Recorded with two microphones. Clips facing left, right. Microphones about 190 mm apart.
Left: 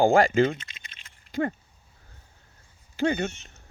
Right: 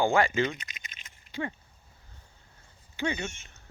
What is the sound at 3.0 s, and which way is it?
Speech, 55° left (ahead or behind).